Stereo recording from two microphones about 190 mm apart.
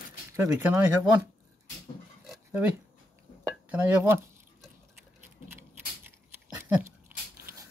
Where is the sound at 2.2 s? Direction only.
5° right (ahead or behind).